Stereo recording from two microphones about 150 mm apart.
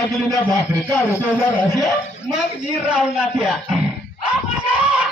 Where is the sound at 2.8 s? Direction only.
5° right (ahead or behind).